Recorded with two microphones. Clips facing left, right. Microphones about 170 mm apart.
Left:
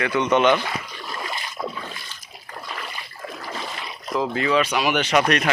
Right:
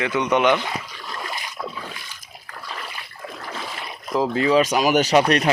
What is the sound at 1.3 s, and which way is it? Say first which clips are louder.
Boat: left 1 dB; centre (ahead or behind).